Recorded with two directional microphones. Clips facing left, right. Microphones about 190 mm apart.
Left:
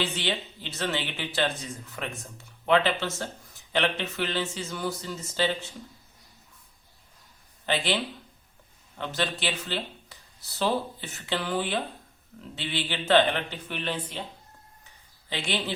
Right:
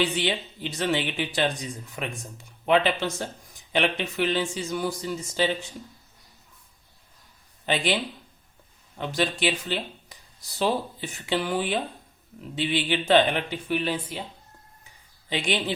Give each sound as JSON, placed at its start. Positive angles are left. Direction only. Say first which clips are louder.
{"t": 0.0, "sound": "speech", "louder": "right 4 dB", "side_deg": -15}
{"t": 7.7, "sound": "speech", "louder": "right 2 dB", "side_deg": -15}
{"t": 9.0, "sound": "speech", "louder": "right 4 dB", "side_deg": -15}
{"t": 15.3, "sound": "speech", "louder": "right 4 dB", "side_deg": -15}